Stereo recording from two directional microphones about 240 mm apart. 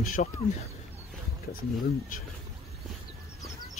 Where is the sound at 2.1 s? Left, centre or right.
Left.